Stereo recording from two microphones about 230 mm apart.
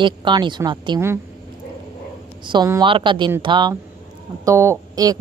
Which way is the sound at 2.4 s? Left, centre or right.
Centre.